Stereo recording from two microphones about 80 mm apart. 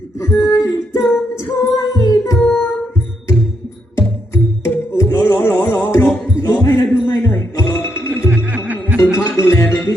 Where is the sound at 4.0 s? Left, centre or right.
Left.